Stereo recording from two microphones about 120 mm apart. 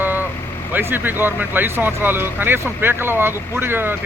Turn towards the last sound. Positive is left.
turn(degrees=-20)  # may be behind; listen again after turning